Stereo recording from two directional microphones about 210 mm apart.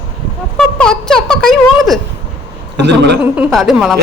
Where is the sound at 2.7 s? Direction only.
55° right (ahead or behind).